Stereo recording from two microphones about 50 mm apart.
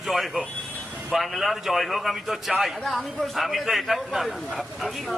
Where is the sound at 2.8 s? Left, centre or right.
Centre.